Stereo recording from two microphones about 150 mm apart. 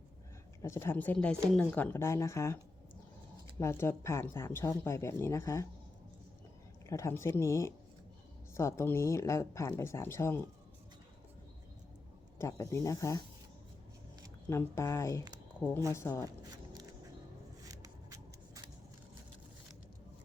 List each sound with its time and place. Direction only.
0.6 s a woman's voice: 20° left (ahead or behind)
3.6 s speech: 20° left (ahead or behind)
6.8 s a woman's voice: 20° left (ahead or behind)
12.4 s speech: 20° left (ahead or behind)
14.5 s a woman's voice: 20° left (ahead or behind)
16.4 s vehicle: 25° right (ahead or behind)
17.7 s shuffling cards: 20° right (ahead or behind)